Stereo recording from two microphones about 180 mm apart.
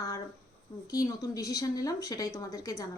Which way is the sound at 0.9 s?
20° left (ahead or behind).